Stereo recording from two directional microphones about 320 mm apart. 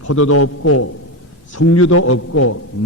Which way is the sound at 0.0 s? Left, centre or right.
Left.